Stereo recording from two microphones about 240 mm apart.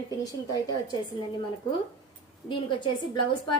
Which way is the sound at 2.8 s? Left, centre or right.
Centre.